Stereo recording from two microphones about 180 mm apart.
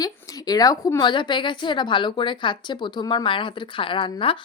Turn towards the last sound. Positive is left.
turn(degrees=30)  # may be behind; listen again after turning